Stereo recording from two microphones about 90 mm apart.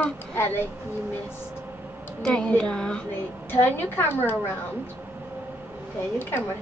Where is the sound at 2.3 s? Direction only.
15° left (ahead or behind).